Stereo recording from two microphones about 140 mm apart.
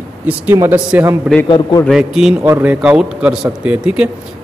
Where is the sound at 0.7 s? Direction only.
15° right (ahead or behind).